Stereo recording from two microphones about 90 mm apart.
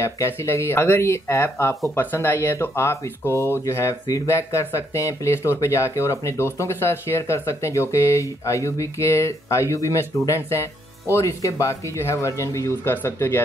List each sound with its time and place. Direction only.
0.0 s speech: 30° left (ahead or behind)